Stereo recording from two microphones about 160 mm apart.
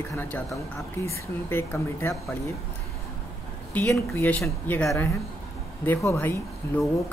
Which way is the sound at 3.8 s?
10° left (ahead or behind).